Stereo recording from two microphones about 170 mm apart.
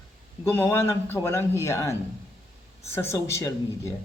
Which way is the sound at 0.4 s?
15° left (ahead or behind).